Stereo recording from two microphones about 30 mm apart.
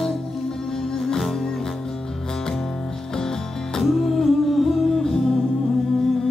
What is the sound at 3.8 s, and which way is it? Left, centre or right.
Music, centre.